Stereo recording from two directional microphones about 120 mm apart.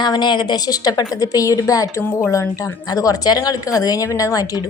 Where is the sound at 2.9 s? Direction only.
30° left (ahead or behind).